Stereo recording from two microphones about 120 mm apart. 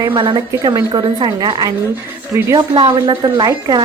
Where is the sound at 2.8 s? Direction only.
35° right (ahead or behind).